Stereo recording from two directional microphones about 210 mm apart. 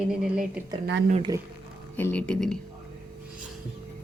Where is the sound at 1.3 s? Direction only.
15° right (ahead or behind).